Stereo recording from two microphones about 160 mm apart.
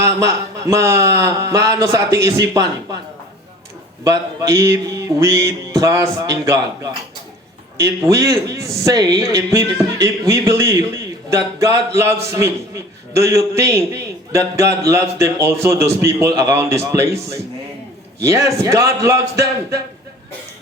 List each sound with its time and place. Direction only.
0.7 s a man's voice: 20° right (ahead or behind)
4.0 s a man's voice: 20° right (ahead or behind)
7.8 s a man's voice: 20° right (ahead or behind)